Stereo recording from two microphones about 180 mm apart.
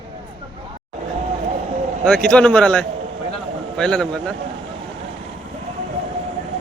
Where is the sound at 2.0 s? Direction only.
5° left (ahead or behind).